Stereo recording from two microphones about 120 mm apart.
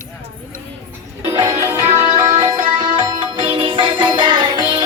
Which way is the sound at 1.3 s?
25° right (ahead or behind).